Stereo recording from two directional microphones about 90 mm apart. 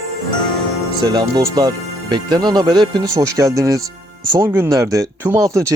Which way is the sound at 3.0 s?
40° right (ahead or behind).